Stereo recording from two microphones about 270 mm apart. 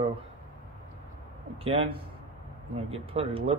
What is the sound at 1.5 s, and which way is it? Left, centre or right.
Speech, right.